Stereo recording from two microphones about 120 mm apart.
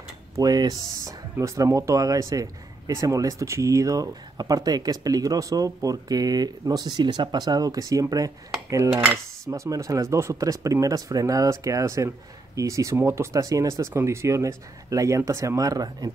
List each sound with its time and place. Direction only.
0.4 s speech: 35° right (ahead or behind)